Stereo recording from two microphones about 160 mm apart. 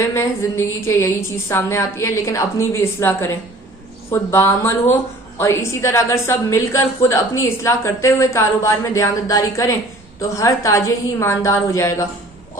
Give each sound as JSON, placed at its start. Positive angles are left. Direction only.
{"t": 0.1, "sound": "a woman's voice", "side_deg": 15}